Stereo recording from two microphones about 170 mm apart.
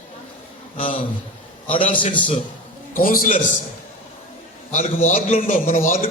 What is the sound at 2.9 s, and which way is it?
Speech, 55° left (ahead or behind).